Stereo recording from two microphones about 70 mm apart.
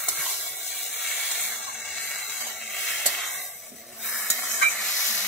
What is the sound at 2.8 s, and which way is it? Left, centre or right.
Sizzle, centre.